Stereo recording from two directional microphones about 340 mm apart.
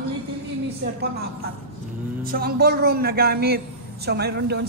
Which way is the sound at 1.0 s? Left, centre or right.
Right.